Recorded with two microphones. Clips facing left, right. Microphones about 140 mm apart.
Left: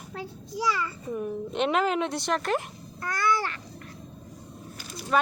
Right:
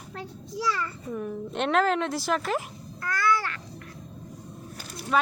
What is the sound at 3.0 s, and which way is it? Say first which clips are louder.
Babbling: right 1 dB; 20° left (ahead or behind).